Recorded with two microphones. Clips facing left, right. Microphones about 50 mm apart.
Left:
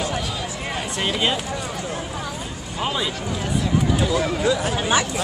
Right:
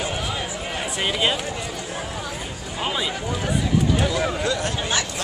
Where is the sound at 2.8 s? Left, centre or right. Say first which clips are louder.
Left 1 dB; centre.